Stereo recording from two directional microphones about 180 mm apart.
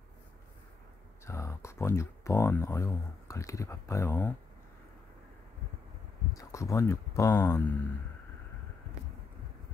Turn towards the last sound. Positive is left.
turn(degrees=10)  # may be behind; listen again after turning